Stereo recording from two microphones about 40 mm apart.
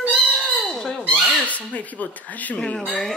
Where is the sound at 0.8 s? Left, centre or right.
Centre.